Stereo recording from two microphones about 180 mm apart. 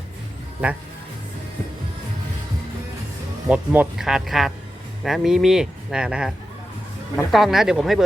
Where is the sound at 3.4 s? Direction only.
5° right (ahead or behind).